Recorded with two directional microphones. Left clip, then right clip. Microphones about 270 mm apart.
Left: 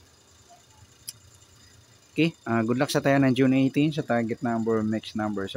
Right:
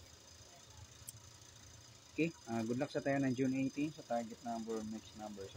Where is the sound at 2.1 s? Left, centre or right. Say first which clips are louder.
Left 14 dB; left.